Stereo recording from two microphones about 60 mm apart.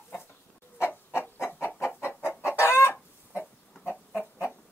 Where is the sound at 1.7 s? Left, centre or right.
Left.